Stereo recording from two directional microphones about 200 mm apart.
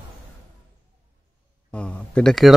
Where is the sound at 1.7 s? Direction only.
5° left (ahead or behind).